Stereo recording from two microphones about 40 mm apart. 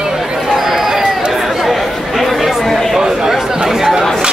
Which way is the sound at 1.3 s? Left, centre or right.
Centre.